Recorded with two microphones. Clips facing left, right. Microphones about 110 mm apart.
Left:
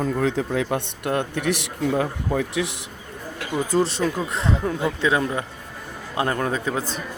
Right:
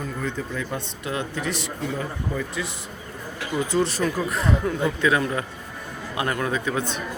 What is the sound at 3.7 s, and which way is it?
A man's voice, 30° left (ahead or behind).